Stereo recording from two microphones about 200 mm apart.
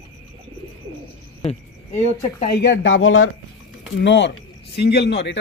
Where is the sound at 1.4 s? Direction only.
35° left (ahead or behind).